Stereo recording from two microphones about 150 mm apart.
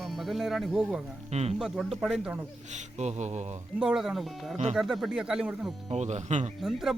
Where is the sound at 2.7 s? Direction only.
50° right (ahead or behind).